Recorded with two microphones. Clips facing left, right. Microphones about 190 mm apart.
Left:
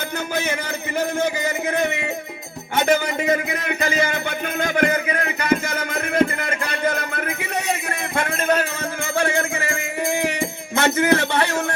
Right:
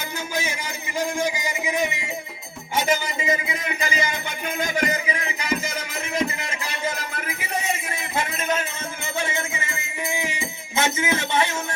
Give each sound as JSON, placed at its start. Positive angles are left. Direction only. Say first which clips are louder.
{"t": 0.3, "sound": "speech", "louder": "left 4 dB", "side_deg": 60}
{"t": 1.2, "sound": "a sound", "louder": "left 4 dB", "side_deg": 60}
{"t": 2.7, "sound": "speech", "louder": "left 5 dB", "side_deg": 65}
{"t": 4.6, "sound": "music", "louder": "left 5 dB", "side_deg": 60}
{"t": 9.6, "sound": "music", "louder": "left 7 dB", "side_deg": 50}
{"t": 10.8, "sound": "a sound", "louder": "left 6 dB", "side_deg": 65}